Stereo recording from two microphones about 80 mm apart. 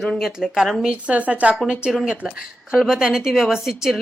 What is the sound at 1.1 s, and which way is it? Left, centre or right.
Speech, centre.